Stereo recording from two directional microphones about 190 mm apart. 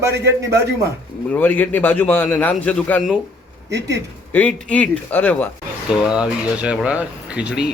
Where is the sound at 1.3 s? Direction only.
10° left (ahead or behind).